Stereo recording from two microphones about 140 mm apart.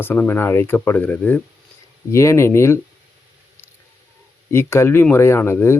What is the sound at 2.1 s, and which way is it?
Speech, 20° left (ahead or behind).